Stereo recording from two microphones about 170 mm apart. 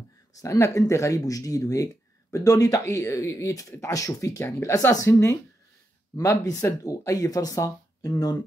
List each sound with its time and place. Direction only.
0.4 s speech: 20° left (ahead or behind)